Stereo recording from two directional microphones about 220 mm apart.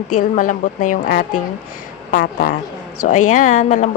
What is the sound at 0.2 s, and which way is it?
A woman's voice, 35° left (ahead or behind).